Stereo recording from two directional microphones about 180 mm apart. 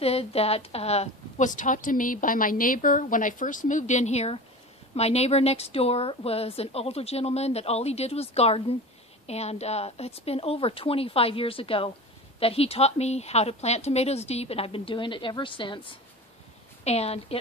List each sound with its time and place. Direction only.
0.0 s a woman's voice: 35° left (ahead or behind)